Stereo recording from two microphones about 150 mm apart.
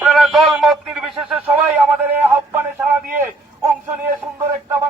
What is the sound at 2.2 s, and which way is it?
Speech, 15° right (ahead or behind).